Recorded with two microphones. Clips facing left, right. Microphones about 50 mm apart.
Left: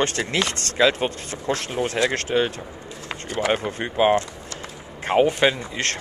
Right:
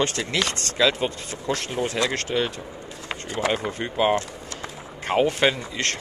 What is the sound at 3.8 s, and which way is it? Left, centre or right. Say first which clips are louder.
Speech: left 3 dB; centre.